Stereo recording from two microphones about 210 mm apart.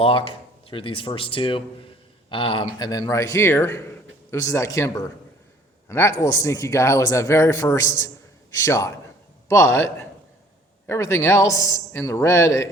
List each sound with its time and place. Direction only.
0.0 s a man's voice: 25° left (ahead or behind)